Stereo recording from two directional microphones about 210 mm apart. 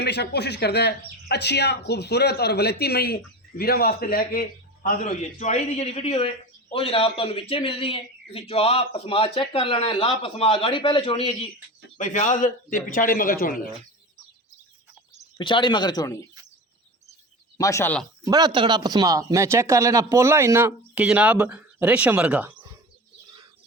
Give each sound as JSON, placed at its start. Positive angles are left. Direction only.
{"t": 0.0, "sound": "a man's voice", "side_deg": 50}
{"t": 11.9, "sound": "a man's voice", "side_deg": 35}
{"t": 15.4, "sound": "a man's voice", "side_deg": 25}
{"t": 17.6, "sound": "speech", "side_deg": 15}
{"t": 18.3, "sound": "speech", "side_deg": -20}